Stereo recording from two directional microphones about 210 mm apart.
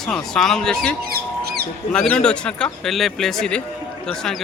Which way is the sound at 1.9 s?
5° left (ahead or behind).